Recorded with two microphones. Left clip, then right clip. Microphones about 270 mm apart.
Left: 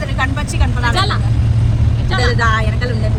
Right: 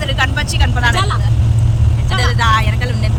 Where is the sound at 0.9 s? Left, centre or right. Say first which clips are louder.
Left 1 dB; right.